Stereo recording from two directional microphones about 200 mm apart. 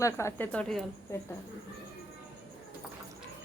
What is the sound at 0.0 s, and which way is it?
Speech, 15° left (ahead or behind).